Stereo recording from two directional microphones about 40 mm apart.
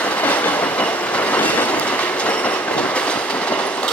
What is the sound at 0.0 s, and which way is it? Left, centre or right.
Train, left.